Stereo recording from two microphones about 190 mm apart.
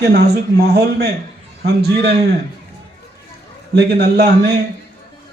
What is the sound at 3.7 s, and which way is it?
Speech, 60° right (ahead or behind).